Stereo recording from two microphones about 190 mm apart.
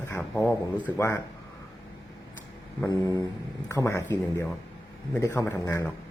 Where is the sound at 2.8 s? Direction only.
20° left (ahead or behind).